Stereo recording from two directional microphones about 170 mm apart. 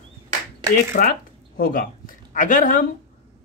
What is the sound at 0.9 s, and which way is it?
Speech, 60° left (ahead or behind).